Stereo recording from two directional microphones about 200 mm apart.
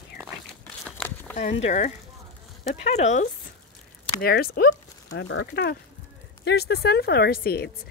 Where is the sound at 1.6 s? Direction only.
35° left (ahead or behind).